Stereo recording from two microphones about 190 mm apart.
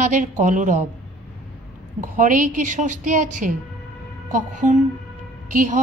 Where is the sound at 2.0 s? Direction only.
45° right (ahead or behind).